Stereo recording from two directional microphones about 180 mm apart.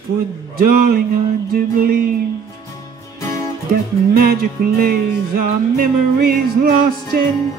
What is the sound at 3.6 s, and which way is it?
Music, 55° right (ahead or behind).